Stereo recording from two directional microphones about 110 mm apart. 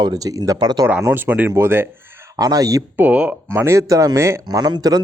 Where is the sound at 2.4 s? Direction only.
35° right (ahead or behind).